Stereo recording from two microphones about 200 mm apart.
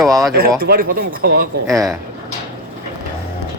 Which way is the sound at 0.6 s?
50° right (ahead or behind).